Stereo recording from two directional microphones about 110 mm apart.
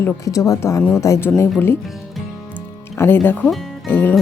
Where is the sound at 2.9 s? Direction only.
20° left (ahead or behind).